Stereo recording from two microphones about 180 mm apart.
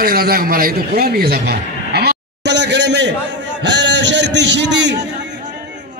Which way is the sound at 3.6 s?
75° right (ahead or behind).